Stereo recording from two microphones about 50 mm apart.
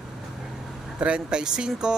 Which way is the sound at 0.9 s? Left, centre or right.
Right.